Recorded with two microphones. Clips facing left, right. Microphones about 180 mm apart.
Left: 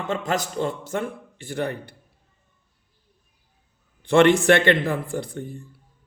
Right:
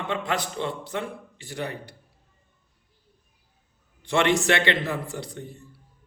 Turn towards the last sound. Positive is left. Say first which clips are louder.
# left 5 dB
turn(degrees=55)  # may be behind; listen again after turning